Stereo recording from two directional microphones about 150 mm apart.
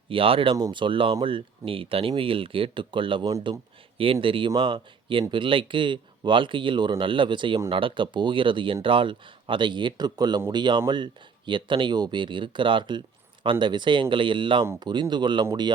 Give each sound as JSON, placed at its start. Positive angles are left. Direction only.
{"t": 0.1, "sound": "speech", "side_deg": -35}
{"t": 3.9, "sound": "speech", "side_deg": -35}